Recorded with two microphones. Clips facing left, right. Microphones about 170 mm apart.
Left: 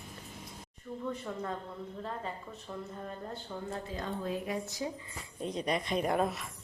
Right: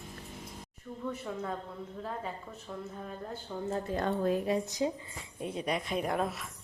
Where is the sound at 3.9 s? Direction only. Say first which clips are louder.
Right 8 dB; 60° right (ahead or behind).